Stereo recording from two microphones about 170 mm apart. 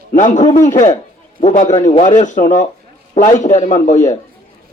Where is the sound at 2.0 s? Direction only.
45° left (ahead or behind).